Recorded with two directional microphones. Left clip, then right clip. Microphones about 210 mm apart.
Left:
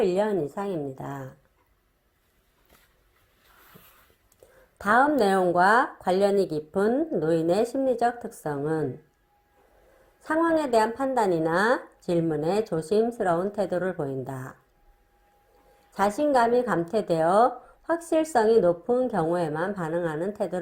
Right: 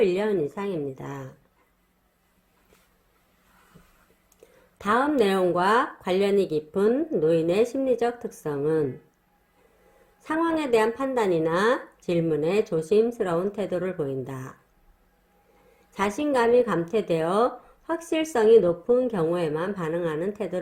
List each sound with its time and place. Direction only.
0.0 s a woman's voice: 25° left (ahead or behind)
4.8 s a woman's voice: 20° left (ahead or behind)
10.2 s a woman's voice: 20° left (ahead or behind)
16.0 s a woman's voice: 20° left (ahead or behind)